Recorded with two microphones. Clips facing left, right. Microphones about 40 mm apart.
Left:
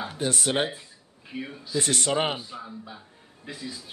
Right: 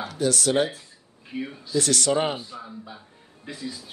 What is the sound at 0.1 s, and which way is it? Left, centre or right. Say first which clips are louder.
Speech: right 5 dB; left.